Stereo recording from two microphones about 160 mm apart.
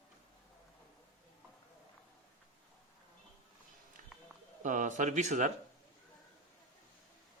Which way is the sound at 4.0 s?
55° right (ahead or behind).